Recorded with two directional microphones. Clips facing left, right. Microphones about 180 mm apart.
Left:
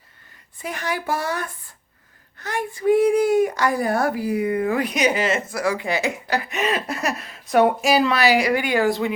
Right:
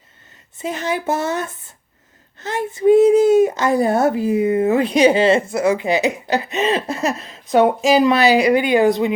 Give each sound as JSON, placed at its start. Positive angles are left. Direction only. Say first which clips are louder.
{"t": 0.6, "sound": "a child's voice", "louder": "right 5 dB", "side_deg": -20}